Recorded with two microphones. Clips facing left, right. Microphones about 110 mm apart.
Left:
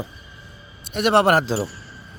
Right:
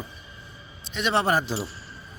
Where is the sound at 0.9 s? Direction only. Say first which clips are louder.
Left 7 dB; 65° left (ahead or behind).